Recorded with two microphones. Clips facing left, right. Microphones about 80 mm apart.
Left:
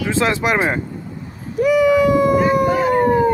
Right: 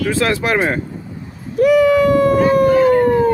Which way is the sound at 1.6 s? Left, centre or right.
Centre.